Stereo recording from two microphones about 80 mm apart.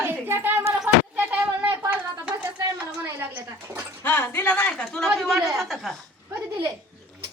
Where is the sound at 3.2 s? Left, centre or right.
Right.